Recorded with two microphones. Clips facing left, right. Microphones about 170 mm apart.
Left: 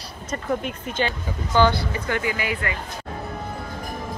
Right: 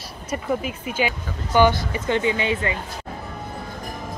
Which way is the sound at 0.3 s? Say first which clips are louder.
Right 1 dB; 5° right (ahead or behind).